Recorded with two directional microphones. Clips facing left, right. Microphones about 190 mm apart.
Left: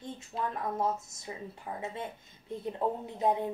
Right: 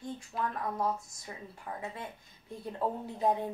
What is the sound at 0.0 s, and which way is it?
Speech, 25° left (ahead or behind).